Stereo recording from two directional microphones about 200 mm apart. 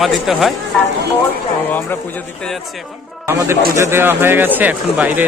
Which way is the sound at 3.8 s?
10° right (ahead or behind).